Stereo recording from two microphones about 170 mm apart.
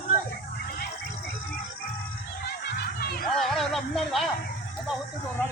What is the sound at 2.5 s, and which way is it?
Music, 65° left (ahead or behind).